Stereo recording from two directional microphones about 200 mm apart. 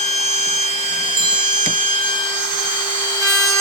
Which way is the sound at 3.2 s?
15° left (ahead or behind).